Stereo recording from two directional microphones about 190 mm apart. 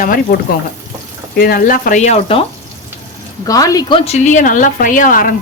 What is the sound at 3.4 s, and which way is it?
A woman's voice, 20° left (ahead or behind).